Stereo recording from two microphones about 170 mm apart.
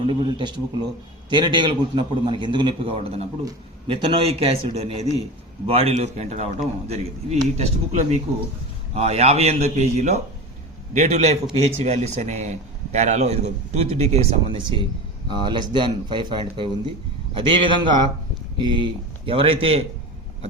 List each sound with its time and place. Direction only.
0.1 s a man's voice: 30° right (ahead or behind)